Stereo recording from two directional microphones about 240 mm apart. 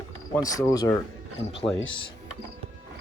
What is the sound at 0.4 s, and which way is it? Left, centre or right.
Speech, centre.